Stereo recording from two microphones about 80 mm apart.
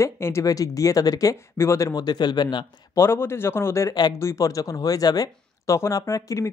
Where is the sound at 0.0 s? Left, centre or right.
Left.